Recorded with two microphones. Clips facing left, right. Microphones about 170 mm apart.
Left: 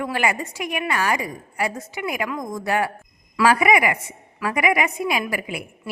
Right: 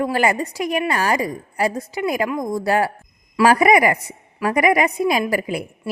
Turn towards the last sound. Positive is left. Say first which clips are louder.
# right 5 dB
turn(degrees=-40)  # may be behind; listen again after turning